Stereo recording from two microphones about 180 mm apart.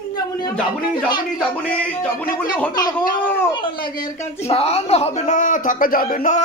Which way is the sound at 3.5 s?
25° left (ahead or behind).